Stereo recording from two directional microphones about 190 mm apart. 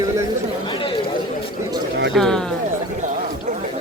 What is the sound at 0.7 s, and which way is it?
Chatter, 25° left (ahead or behind).